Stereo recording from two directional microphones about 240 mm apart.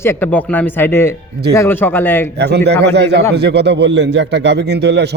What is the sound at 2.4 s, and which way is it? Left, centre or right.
A man's voice, right.